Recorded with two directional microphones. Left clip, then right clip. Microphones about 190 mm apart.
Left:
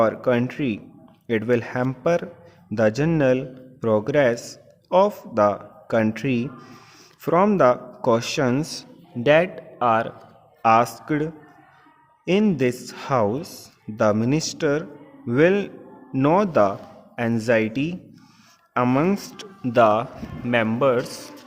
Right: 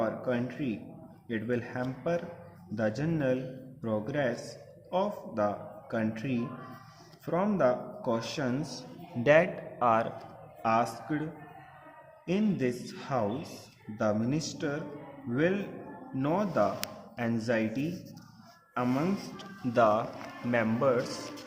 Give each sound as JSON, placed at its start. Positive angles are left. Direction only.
{"t": 0.0, "sound": "a man's voice", "side_deg": 50}
{"t": 9.2, "sound": "speech", "side_deg": 30}
{"t": 10.6, "sound": "speech", "side_deg": 45}
{"t": 19.7, "sound": "speech", "side_deg": 35}